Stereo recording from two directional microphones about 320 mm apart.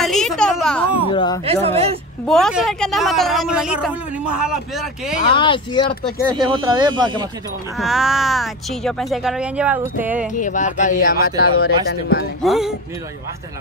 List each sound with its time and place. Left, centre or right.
0.0 s a sound: centre
1.1 s speech: centre
1.4 s speech: centre
2.2 s a woman's voice: centre
5.2 s speech: centre
6.3 s speech: centre
7.7 s a woman's voice: centre
10.4 s speech: left
11.3 s speech: left
11.6 s speech: left
12.4 s a woman's voice: centre